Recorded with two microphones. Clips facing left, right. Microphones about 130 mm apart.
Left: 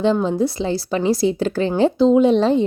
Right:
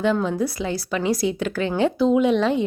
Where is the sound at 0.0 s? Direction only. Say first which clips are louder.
Left 4 dB; 30° left (ahead or behind).